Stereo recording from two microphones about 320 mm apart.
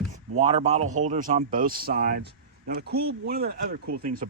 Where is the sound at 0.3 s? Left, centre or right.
Centre.